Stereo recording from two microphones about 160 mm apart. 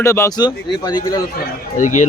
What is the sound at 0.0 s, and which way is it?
A man's voice, 15° left (ahead or behind).